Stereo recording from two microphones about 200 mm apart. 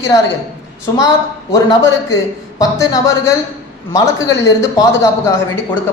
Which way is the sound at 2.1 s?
15° left (ahead or behind).